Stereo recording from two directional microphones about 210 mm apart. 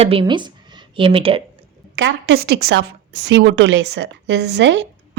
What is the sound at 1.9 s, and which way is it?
A woman's voice, 55° right (ahead or behind).